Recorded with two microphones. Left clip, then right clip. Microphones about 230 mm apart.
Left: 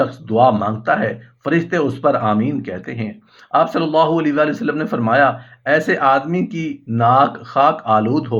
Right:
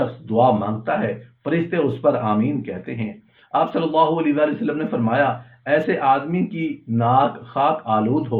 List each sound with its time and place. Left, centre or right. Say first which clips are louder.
0.3 s a man's voice: left 3 dB; left